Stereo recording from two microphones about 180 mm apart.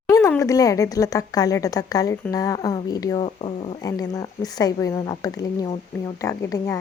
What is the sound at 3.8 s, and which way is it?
A woman's voice, 20° left (ahead or behind).